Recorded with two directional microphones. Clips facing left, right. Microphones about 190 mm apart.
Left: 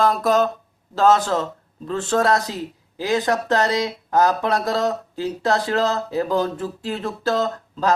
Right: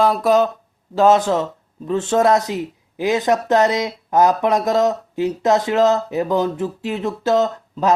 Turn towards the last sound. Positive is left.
turn(degrees=-20)  # may be behind; listen again after turning